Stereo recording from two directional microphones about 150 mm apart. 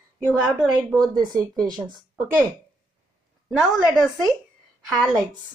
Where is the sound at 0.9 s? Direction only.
25° right (ahead or behind).